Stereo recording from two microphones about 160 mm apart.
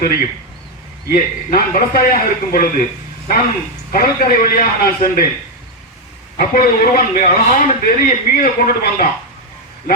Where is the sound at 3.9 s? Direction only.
65° left (ahead or behind).